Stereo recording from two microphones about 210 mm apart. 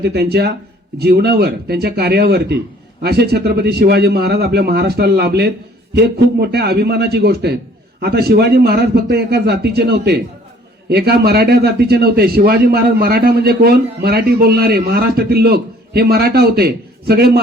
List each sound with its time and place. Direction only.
0.0 s a man's voice: 50° right (ahead or behind)